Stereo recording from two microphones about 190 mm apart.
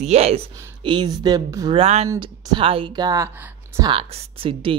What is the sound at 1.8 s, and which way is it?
Speech, 35° right (ahead or behind).